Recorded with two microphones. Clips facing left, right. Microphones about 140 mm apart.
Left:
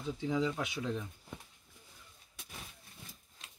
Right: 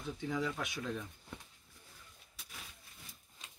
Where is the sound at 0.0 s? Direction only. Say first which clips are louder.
Left 4 dB; 20° left (ahead or behind).